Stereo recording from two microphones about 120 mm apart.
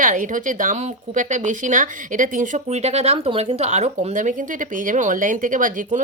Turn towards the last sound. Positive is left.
turn(degrees=-90)